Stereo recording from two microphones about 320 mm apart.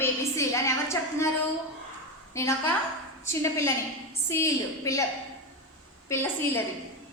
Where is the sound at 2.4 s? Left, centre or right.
Centre.